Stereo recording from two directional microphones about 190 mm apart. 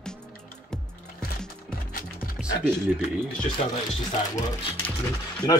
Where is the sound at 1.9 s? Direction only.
50° left (ahead or behind).